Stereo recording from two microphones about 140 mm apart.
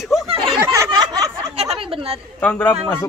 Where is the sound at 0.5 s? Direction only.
20° right (ahead or behind).